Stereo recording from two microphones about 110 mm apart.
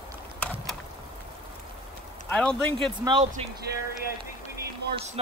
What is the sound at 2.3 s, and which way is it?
Speech, 10° left (ahead or behind).